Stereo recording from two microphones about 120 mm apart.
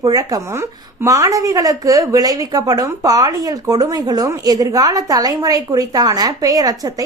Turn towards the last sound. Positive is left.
turn(degrees=-30)  # may be behind; listen again after turning